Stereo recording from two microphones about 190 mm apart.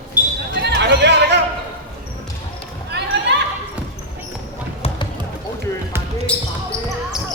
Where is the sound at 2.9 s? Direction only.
65° right (ahead or behind).